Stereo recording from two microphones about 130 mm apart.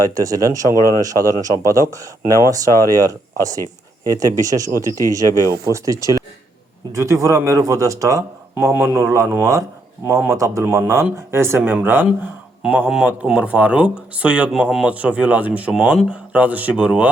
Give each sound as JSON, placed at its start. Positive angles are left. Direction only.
{"t": 0.0, "sound": "speech", "side_deg": -30}